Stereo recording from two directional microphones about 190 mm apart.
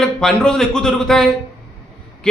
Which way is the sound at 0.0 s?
5° left (ahead or behind).